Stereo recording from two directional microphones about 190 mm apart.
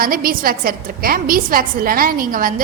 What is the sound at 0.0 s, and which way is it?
A woman's voice, 50° right (ahead or behind).